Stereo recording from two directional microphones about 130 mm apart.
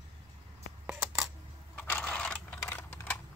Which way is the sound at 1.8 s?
10° left (ahead or behind).